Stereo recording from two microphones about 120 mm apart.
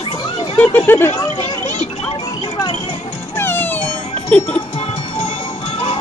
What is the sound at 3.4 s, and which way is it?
Music, 20° left (ahead or behind).